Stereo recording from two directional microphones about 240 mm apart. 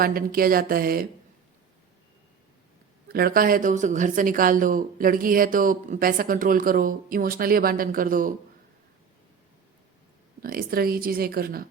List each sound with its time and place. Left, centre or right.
0.0 s speech: right
3.1 s speech: right
10.4 s speech: right